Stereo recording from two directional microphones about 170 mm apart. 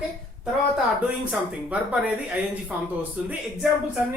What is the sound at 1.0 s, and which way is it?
Speech, 10° right (ahead or behind).